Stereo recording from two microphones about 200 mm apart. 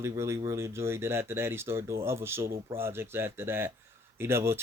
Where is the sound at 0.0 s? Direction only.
15° right (ahead or behind).